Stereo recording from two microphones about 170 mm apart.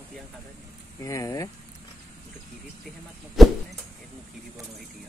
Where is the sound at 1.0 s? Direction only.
20° left (ahead or behind).